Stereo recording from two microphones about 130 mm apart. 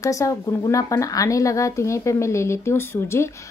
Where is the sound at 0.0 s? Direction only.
25° left (ahead or behind).